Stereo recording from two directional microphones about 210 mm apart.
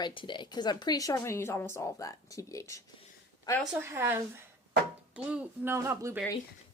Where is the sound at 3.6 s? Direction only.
10° right (ahead or behind).